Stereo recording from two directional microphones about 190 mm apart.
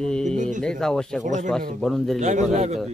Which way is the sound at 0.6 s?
5° left (ahead or behind).